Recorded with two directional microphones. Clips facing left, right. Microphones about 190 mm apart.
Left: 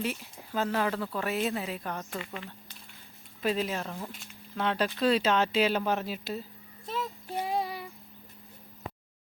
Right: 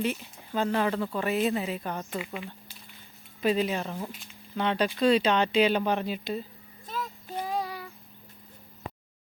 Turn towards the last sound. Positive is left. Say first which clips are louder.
# left 1 dB
turn(degrees=25)  # may be behind; listen again after turning